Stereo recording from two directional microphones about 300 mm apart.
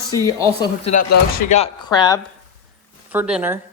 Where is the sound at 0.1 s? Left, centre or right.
Centre.